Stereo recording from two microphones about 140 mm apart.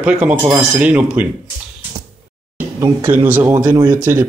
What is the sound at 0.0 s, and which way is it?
Speech, 10° right (ahead or behind).